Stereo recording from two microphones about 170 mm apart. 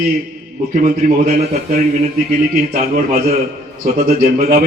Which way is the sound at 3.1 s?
60° right (ahead or behind).